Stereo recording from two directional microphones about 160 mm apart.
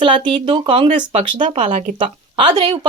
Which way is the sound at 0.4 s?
35° right (ahead or behind).